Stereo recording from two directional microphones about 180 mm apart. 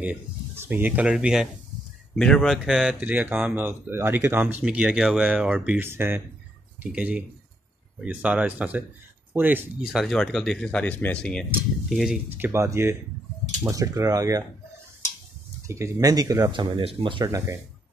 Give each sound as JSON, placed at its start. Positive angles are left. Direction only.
{"t": 0.0, "sound": "speech", "side_deg": -10}
{"t": 12.3, "sound": "speech", "side_deg": -10}
{"t": 15.6, "sound": "speech", "side_deg": -15}